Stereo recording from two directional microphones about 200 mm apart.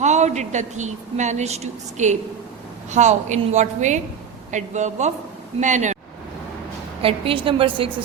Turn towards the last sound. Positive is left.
turn(degrees=-25)  # may be behind; listen again after turning